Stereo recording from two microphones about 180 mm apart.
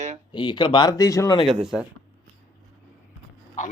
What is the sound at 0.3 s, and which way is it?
Speech, 25° left (ahead or behind).